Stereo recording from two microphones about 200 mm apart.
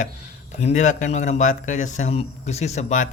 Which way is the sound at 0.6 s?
35° left (ahead or behind).